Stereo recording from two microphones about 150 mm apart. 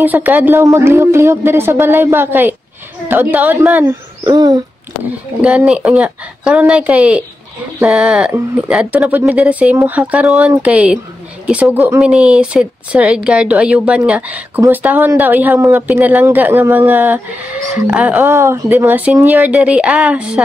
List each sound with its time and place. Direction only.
0.0 s a man's voice: 10° right (ahead or behind)
4.3 s a sound: 25° right (ahead or behind)
5.7 s speech: 5° right (ahead or behind)
12.0 s speech: 5° right (ahead or behind)
18.2 s speech: 15° right (ahead or behind)